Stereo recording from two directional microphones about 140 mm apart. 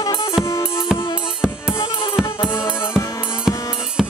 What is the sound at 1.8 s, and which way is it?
Music, 40° left (ahead or behind).